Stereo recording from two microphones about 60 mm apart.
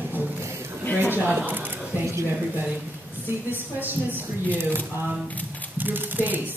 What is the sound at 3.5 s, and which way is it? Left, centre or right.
Speech, right.